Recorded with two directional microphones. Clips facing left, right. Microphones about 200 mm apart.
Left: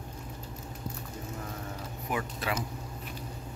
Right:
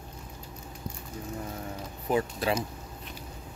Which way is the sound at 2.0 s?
30° right (ahead or behind).